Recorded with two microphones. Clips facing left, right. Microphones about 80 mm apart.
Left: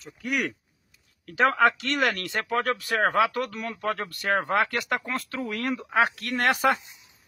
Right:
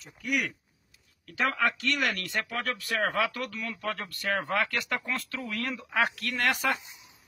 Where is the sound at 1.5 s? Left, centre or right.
Left.